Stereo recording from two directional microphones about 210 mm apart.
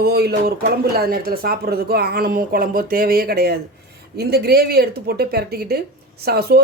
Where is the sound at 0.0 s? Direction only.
50° right (ahead or behind).